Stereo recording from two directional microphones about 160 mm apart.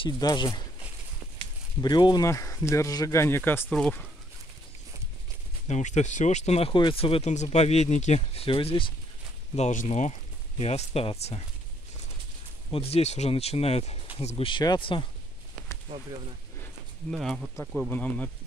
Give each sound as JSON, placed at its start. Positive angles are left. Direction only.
{"t": 0.0, "sound": "speech", "side_deg": 25}
{"t": 1.8, "sound": "speech", "side_deg": 25}
{"t": 5.7, "sound": "speech", "side_deg": 45}
{"t": 9.6, "sound": "speech", "side_deg": 45}
{"t": 12.7, "sound": "speech", "side_deg": 40}
{"t": 17.1, "sound": "speech", "side_deg": 0}